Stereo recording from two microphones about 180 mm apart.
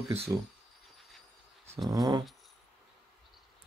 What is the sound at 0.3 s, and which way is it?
Speech, 15° right (ahead or behind).